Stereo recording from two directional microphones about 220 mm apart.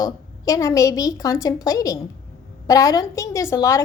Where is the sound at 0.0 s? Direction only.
15° left (ahead or behind).